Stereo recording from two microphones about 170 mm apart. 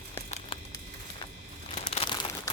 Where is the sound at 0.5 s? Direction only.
30° left (ahead or behind).